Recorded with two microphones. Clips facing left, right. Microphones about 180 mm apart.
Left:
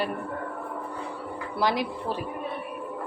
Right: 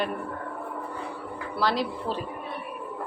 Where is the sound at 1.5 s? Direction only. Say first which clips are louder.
Even; 15° left (ahead or behind).